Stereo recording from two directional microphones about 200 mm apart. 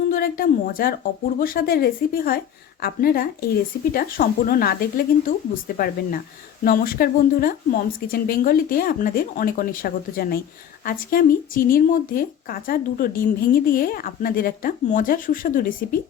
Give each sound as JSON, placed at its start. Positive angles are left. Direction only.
{"t": 0.1, "sound": "speech", "side_deg": 45}